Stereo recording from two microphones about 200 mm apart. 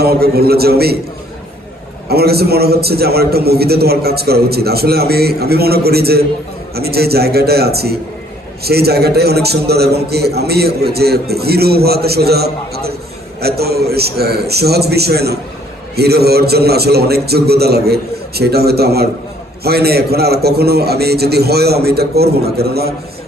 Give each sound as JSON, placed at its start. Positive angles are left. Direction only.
{"t": 0.0, "sound": "a man's voice", "side_deg": -50}
{"t": 2.0, "sound": "a man's voice", "side_deg": -50}